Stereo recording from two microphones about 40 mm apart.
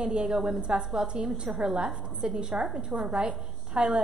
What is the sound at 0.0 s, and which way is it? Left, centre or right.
A woman's voice, right.